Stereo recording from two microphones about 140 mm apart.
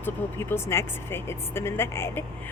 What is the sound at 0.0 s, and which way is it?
A woman's voice, 15° left (ahead or behind).